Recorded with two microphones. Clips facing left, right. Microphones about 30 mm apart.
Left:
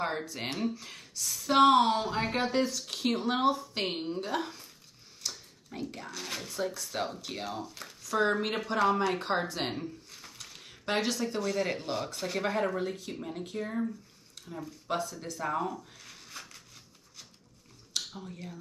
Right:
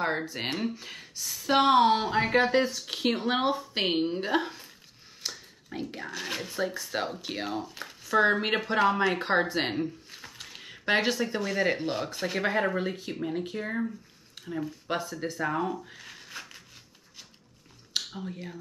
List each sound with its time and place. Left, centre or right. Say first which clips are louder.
0.0 s speech: right 4 dB; centre
0.3 s a woman's voice: right 2 dB; right
2.0 s a woman's voice: right 6 dB; right
5.7 s a woman's voice: right 3 dB; right
16.3 s a sound: right 3 dB; right
17.9 s speech: right 4 dB; right